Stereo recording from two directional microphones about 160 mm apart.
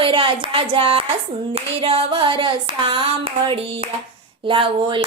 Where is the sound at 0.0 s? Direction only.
30° right (ahead or behind).